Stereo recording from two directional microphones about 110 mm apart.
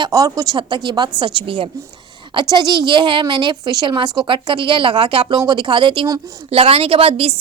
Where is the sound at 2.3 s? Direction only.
40° right (ahead or behind); by 7.3 s 60° right (ahead or behind).